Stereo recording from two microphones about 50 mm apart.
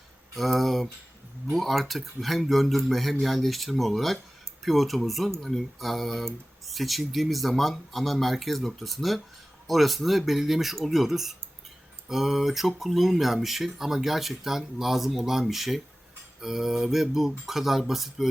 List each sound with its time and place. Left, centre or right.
0.3 s speech: centre